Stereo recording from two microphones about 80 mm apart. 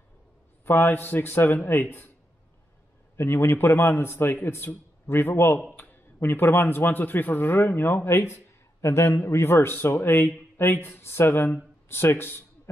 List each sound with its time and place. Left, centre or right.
0.7 s a man's voice: left
3.2 s a man's voice: left